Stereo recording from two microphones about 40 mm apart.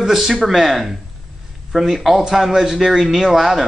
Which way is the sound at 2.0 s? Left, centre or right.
Centre.